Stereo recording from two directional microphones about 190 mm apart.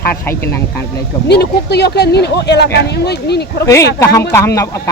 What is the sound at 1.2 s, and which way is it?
Speech, 60° left (ahead or behind).